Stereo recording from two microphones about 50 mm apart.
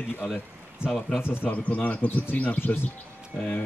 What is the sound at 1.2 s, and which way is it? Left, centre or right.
Speech, left.